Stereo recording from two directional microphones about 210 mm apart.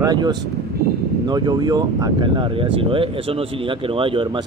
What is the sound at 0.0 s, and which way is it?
Speech, 20° right (ahead or behind).